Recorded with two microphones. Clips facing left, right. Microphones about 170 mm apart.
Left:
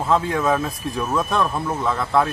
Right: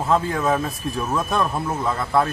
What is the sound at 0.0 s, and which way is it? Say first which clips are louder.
Speech: left 1 dB; centre (ahead or behind).